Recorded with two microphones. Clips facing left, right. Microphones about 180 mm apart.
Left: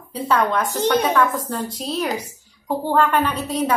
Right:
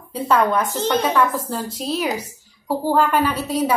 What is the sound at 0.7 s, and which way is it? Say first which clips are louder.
Speech: left 2 dB; 15° left (ahead or behind).